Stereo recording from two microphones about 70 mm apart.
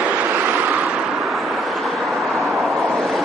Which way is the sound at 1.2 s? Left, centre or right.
Centre.